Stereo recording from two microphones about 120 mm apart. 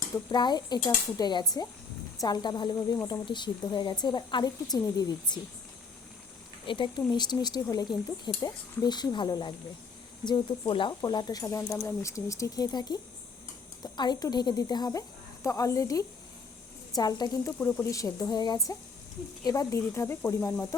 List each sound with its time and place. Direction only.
0.3 s speech: 35° left (ahead or behind)
6.7 s speech: 40° left (ahead or behind)
17.6 s speech: 10° left (ahead or behind)
17.9 s speech: 30° left (ahead or behind)